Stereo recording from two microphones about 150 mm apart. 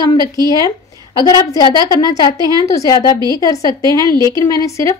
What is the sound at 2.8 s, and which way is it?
A woman's voice, 25° left (ahead or behind).